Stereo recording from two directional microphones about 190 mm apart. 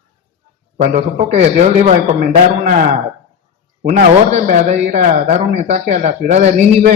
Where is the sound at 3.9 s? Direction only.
35° right (ahead or behind).